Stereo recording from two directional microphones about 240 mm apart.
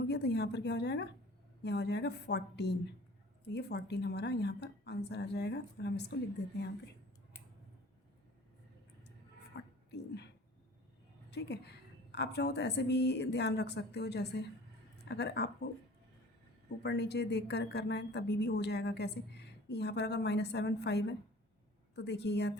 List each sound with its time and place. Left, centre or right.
0.0 s a woman's voice: left
9.5 s a sound: left
11.3 s speech: left
16.8 s speech: left